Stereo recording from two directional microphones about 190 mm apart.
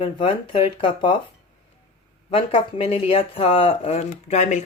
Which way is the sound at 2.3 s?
30° left (ahead or behind).